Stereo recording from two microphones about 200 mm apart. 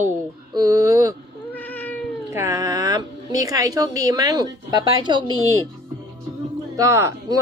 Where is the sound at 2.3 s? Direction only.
15° right (ahead or behind).